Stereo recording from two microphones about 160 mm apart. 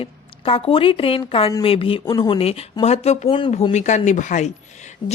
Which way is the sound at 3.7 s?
45° left (ahead or behind).